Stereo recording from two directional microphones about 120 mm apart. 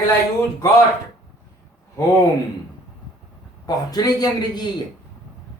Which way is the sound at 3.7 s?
35° left (ahead or behind).